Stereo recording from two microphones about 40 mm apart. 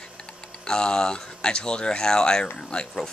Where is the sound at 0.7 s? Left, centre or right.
Centre.